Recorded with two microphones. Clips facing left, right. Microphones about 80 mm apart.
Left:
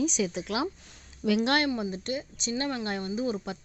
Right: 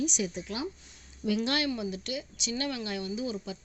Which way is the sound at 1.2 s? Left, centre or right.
Left.